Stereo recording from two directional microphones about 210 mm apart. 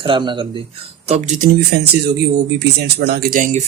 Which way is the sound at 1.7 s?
50° right (ahead or behind).